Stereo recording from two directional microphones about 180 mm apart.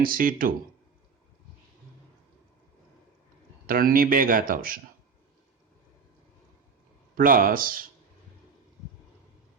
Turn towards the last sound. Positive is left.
turn(degrees=-50)  # may be behind; listen again after turning